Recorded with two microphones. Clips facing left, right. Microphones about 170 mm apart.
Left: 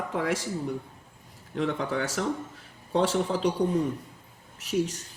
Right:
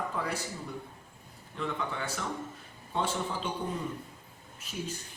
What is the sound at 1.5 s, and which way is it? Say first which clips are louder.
Speech: left 7 dB; 85° left.